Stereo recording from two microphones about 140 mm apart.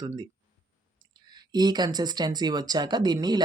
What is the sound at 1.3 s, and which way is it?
Speech, 30° right (ahead or behind).